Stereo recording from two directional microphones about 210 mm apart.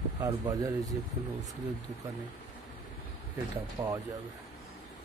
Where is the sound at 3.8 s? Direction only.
15° right (ahead or behind).